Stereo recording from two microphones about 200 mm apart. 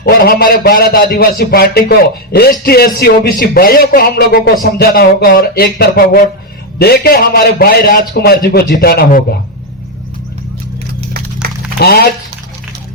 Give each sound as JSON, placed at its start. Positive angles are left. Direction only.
{"t": 0.0, "sound": "a man's voice", "side_deg": 50}
{"t": 11.4, "sound": "music", "side_deg": -50}
{"t": 11.8, "sound": "a man's voice", "side_deg": 50}